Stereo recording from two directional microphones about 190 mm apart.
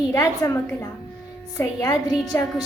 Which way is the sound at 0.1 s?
15° left (ahead or behind).